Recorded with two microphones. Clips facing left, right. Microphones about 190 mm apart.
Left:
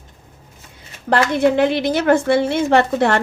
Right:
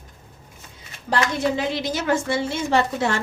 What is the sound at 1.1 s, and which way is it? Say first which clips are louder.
A woman's voice: left 7 dB; 60° left (ahead or behind).